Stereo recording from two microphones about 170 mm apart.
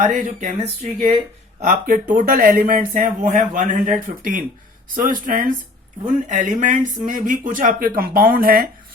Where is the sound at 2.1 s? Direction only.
55° right (ahead or behind).